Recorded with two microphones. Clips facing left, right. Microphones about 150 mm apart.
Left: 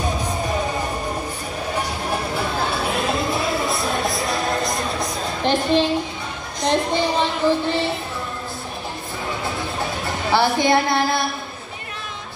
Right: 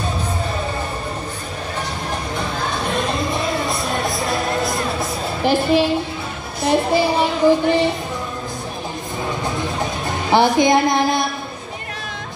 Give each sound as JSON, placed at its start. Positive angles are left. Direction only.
{"t": 1.8, "sound": "music", "side_deg": 10}
{"t": 5.4, "sound": "a woman's voice", "side_deg": -5}
{"t": 10.3, "sound": "speech", "side_deg": -15}